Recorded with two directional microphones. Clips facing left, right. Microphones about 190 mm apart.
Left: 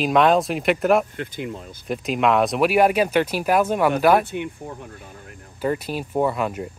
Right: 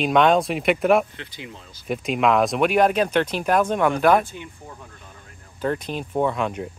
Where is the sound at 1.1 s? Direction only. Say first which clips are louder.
Left 8 dB; 50° left (ahead or behind).